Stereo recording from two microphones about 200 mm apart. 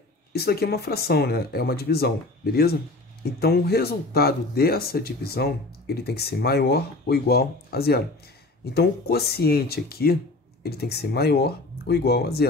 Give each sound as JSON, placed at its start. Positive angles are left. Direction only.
{"t": 0.3, "sound": "speech", "side_deg": 55}